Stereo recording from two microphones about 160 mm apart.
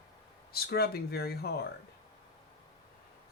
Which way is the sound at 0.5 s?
75° left (ahead or behind).